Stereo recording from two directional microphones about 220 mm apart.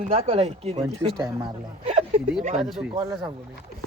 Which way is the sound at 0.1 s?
25° right (ahead or behind).